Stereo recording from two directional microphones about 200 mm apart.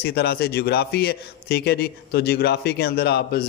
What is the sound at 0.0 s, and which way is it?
A man's voice, 50° left (ahead or behind).